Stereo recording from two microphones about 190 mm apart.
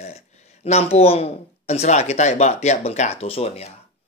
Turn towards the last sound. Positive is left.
turn(degrees=30)  # may be behind; listen again after turning